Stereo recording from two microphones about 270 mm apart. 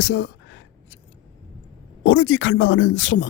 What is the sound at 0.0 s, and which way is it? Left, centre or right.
Speech, left.